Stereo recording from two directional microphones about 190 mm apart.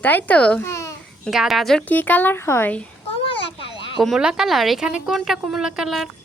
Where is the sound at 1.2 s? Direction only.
Centre (ahead or behind).